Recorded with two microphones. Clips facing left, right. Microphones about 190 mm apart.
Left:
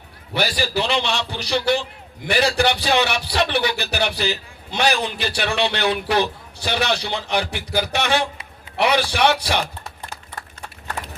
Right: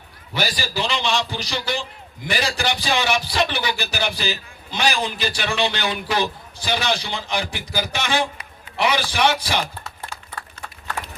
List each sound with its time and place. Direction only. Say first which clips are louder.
0.3 s a man's voice: left 3 dB; 60° left (ahead or behind)